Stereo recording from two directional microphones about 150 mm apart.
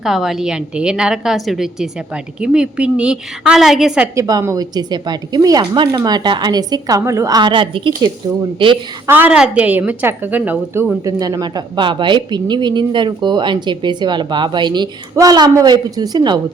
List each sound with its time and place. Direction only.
0.0 s a woman's voice: centre (ahead or behind)
4.1 s a woman's voice: 20° right (ahead or behind)
9.0 s a woman's voice: 10° right (ahead or behind)
11.0 s a woman's voice: 25° right (ahead or behind)